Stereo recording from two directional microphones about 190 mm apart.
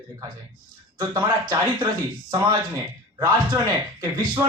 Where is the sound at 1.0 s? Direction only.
20° right (ahead or behind).